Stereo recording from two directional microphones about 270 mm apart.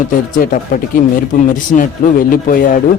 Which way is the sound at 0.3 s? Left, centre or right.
Left.